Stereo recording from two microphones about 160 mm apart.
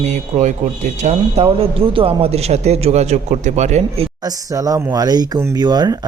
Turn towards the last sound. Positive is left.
turn(degrees=-25)  # may be behind; listen again after turning